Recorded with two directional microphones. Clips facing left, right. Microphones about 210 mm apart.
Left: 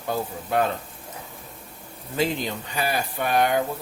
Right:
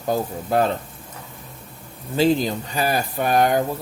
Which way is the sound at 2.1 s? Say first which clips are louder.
Right 7 dB; 35° right (ahead or behind).